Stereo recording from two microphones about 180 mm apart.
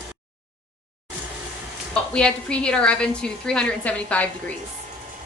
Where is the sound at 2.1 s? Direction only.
5° left (ahead or behind).